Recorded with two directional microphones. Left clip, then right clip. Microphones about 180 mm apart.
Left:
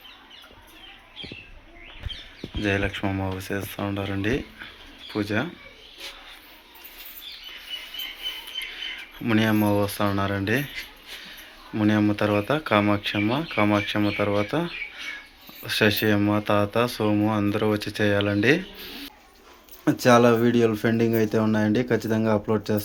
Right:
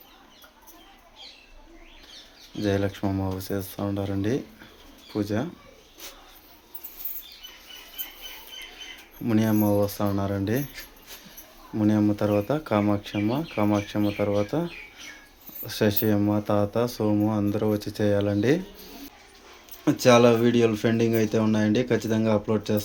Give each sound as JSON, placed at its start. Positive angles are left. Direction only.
{"t": 2.6, "sound": "speech", "side_deg": -20}
{"t": 9.2, "sound": "speech", "side_deg": -10}
{"t": 15.6, "sound": "speech", "side_deg": -15}
{"t": 19.8, "sound": "speech", "side_deg": -5}